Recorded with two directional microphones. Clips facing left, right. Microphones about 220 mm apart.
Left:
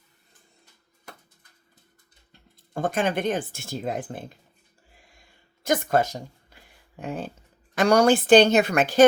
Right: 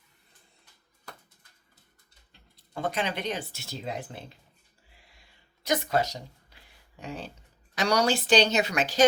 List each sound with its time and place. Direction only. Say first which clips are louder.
2.7 s speech: left 6 dB; 50° left (ahead or behind)
5.6 s speech: left 4 dB; 50° left (ahead or behind)